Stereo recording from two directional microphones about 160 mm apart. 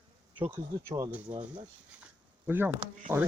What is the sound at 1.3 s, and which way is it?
Speech, 45° right (ahead or behind).